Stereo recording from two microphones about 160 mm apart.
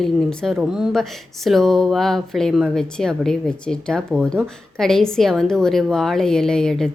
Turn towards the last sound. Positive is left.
turn(degrees=5)  # may be behind; listen again after turning